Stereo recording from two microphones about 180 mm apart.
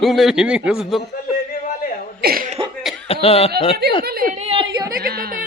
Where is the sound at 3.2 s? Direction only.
35° left (ahead or behind).